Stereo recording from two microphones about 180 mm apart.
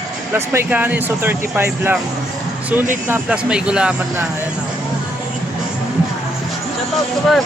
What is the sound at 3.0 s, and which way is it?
Speech, 10° right (ahead or behind).